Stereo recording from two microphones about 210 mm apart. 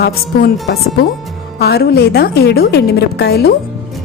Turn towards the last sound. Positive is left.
turn(degrees=50)  # may be behind; listen again after turning